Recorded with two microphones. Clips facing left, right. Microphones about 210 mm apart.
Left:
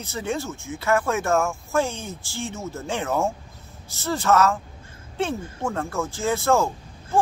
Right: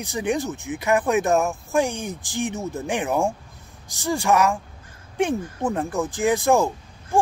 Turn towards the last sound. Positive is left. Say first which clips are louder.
# right 2 dB
turn(degrees=-15)  # may be behind; listen again after turning